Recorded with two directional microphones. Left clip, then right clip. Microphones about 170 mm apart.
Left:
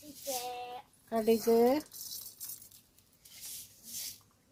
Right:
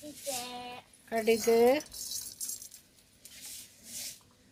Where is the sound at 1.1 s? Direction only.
40° left (ahead or behind).